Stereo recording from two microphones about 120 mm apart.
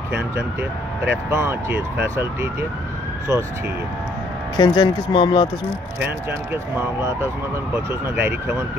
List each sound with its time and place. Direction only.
0.4 s speech: 20° right (ahead or behind)
4.6 s speech: 40° left (ahead or behind)
5.9 s speech: 20° right (ahead or behind)